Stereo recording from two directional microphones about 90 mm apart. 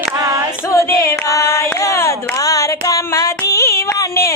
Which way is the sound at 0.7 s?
30° left (ahead or behind).